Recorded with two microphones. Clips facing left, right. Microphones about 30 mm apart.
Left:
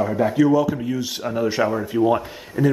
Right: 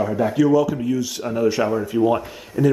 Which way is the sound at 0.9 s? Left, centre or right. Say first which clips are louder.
Right 2 dB; left.